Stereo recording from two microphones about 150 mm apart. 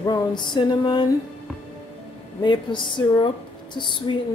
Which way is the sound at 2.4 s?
30° left (ahead or behind).